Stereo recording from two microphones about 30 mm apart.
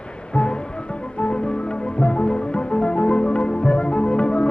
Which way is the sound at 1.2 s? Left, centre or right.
Left.